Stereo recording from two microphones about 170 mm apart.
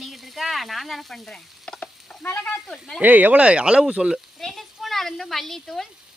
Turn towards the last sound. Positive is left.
turn(degrees=0)  # may be behind; listen again after turning